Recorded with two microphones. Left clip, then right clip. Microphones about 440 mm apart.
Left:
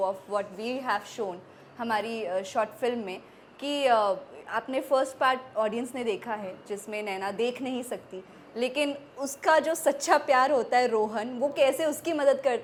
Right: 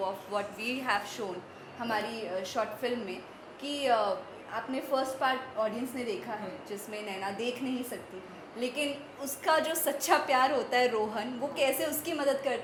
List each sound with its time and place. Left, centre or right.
0.0 s a woman's voice: left
8.5 s a woman's voice: left